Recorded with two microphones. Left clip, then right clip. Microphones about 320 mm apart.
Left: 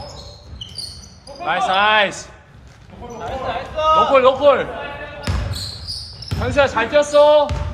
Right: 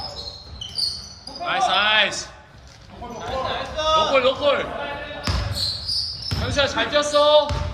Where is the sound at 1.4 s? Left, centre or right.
Centre.